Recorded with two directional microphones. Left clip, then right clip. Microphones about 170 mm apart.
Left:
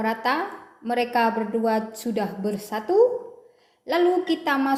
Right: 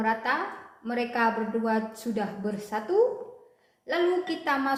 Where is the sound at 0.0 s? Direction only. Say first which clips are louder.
Left 3 dB; 40° left (ahead or behind).